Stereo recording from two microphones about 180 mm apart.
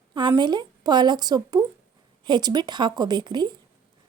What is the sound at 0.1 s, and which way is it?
A woman's voice, 25° right (ahead or behind).